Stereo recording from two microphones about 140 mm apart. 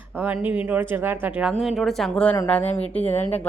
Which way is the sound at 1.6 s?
Centre (ahead or behind).